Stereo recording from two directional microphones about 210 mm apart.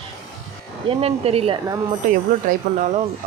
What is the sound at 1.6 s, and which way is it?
Speech, 15° right (ahead or behind).